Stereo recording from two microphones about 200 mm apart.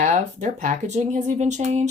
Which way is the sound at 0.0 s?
40° right (ahead or behind).